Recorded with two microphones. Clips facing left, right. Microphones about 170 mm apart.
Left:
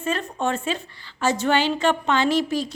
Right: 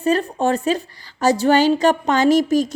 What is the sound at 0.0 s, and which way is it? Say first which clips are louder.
A woman's voice: right 7 dB; 35° right (ahead or behind).